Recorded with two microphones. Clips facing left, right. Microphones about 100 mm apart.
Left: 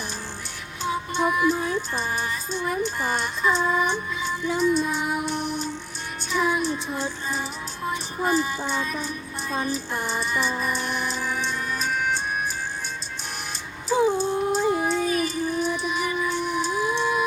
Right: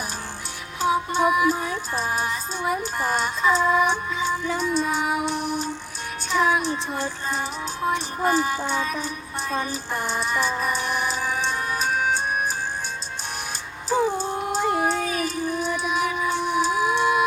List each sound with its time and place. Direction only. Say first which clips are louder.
1.1 s music: left 2 dB; 5° right (ahead or behind)
13.9 s music: left 2 dB; 5° left (ahead or behind)
14.6 s a sound: even; 65° right (ahead or behind)
15.0 s child singing: left 1 dB; centre (ahead or behind)